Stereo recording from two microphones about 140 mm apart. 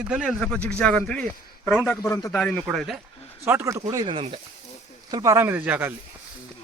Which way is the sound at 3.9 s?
35° right (ahead or behind).